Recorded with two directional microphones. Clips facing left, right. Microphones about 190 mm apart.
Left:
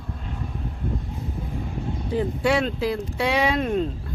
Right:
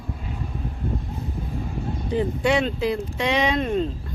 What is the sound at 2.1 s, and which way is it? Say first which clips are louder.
Speech: right 1 dB; centre (ahead or behind).